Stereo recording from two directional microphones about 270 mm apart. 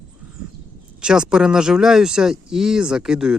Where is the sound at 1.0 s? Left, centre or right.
Centre.